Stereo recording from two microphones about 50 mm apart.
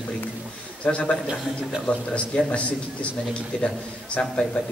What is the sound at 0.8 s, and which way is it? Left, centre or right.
A man's voice, left.